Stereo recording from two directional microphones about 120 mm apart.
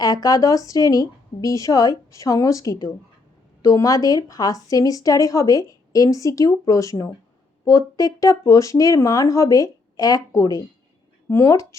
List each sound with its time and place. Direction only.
0.0 s speech: 30° left (ahead or behind)